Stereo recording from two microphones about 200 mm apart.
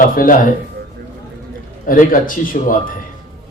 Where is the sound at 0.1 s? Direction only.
45° left (ahead or behind).